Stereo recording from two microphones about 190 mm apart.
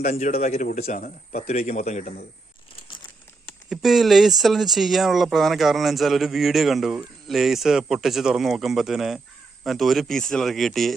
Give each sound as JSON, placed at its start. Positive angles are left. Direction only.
{"t": 0.0, "sound": "speech", "side_deg": 40}
{"t": 3.7, "sound": "speech", "side_deg": 0}